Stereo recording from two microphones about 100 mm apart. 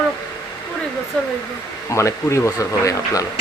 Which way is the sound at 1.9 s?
30° left (ahead or behind).